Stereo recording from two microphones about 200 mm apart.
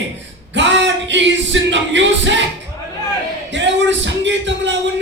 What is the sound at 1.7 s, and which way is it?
Music, 65° right (ahead or behind).